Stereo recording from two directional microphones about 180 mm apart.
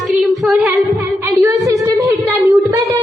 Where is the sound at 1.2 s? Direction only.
15° right (ahead or behind).